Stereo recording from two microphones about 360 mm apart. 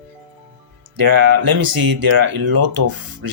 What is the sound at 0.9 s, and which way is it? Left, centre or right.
Speech, right.